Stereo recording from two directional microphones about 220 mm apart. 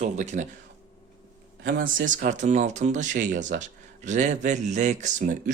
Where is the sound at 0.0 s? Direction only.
35° right (ahead or behind).